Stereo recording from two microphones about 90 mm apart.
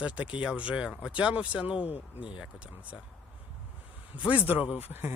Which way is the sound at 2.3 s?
10° right (ahead or behind).